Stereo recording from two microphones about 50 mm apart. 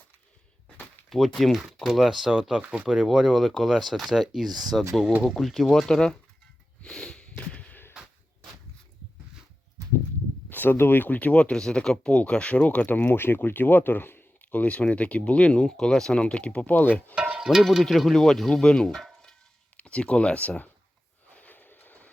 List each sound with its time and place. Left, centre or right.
1.4 s speech: centre
6.8 s a sound: centre
7.2 s a sound: left
7.7 s a sound: left
10.5 s speech: left
11.3 s speech: centre; by 14.3 s left
14.5 s speech: left; by 16.2 s centre
16.2 s speech: left
17.2 s cowbell: right
17.6 s speech: centre; by 20.5 s left
21.3 s train: left